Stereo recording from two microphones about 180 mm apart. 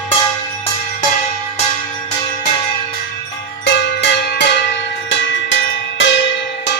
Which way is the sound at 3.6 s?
75° left (ahead or behind).